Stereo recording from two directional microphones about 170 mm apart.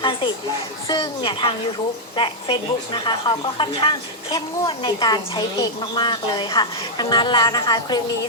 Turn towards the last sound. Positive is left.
turn(degrees=25)  # may be behind; listen again after turning